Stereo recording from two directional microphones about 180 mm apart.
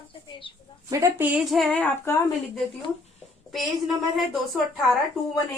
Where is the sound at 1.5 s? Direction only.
5° left (ahead or behind).